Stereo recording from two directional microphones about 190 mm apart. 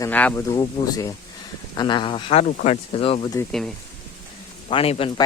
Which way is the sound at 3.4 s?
15° left (ahead or behind).